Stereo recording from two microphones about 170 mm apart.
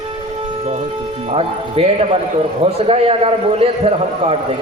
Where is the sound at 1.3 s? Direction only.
35° right (ahead or behind).